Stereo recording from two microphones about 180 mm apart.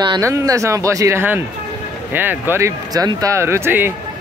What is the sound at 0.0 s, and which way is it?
Speech, 20° right (ahead or behind).